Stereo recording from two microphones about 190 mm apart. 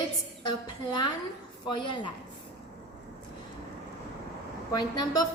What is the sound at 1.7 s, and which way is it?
Speech, 25° left (ahead or behind).